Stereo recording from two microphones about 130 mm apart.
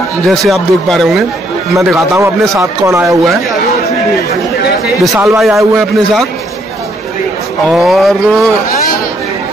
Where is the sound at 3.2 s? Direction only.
Centre (ahead or behind).